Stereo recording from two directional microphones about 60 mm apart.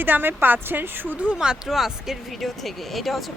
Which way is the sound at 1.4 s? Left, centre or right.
Centre.